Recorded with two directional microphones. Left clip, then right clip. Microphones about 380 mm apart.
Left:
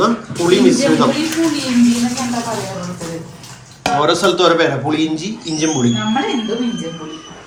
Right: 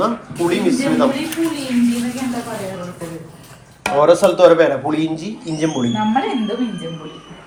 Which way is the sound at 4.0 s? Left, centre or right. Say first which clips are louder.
Right 4 dB; centre.